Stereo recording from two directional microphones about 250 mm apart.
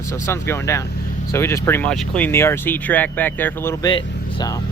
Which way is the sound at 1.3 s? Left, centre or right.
Centre.